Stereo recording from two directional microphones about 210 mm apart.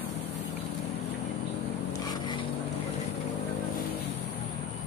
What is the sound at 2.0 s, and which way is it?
Vehicle, 20° left (ahead or behind).